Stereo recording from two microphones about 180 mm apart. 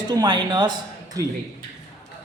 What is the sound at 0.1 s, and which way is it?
A man's voice, 25° right (ahead or behind).